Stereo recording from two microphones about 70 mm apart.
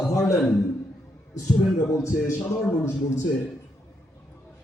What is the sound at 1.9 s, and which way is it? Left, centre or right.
Speech, left.